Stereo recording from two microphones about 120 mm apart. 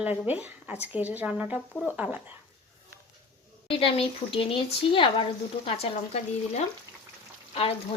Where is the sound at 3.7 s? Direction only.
50° left (ahead or behind).